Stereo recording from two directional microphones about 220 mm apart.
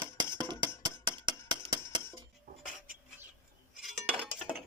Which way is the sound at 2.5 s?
35° right (ahead or behind).